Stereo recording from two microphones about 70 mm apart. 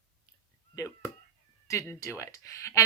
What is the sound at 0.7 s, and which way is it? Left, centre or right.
Speech, left.